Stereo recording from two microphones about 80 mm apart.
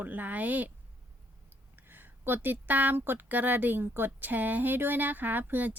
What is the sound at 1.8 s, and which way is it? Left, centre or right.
Speech, right.